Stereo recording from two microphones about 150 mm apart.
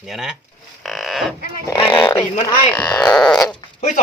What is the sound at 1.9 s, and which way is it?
Speech, 15° left (ahead or behind).